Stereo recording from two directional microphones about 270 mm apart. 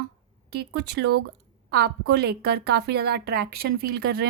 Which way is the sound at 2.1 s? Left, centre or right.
Right.